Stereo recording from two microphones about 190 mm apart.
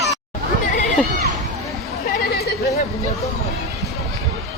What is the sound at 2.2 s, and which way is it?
Chatter, 55° left (ahead or behind).